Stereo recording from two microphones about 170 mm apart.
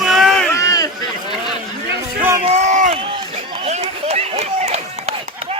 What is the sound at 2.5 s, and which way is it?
Run, 45° right (ahead or behind).